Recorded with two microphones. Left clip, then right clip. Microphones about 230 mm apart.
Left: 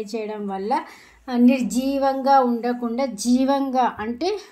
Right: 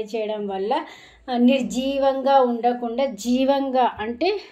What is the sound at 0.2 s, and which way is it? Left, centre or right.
A woman's voice, left.